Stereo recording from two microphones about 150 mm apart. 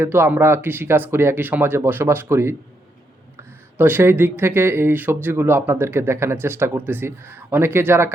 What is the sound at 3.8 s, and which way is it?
Speech, 15° right (ahead or behind).